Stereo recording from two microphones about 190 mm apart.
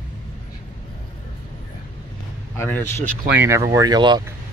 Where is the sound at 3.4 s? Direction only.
15° right (ahead or behind).